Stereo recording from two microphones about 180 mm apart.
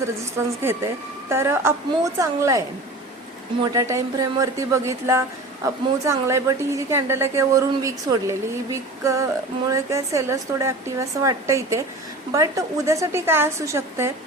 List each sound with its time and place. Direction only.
0.2 s a woman's voice: 15° right (ahead or behind)